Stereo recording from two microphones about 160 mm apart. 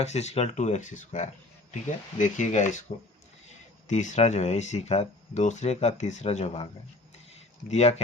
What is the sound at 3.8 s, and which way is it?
Speech, 50° left (ahead or behind).